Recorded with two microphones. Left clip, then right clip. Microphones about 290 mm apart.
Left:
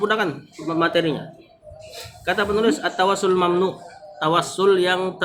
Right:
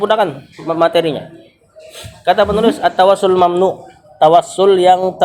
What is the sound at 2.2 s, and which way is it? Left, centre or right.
Speech, centre.